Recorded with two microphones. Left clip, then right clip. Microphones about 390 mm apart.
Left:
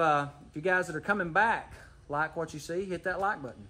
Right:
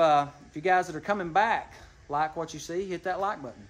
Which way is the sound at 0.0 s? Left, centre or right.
Centre.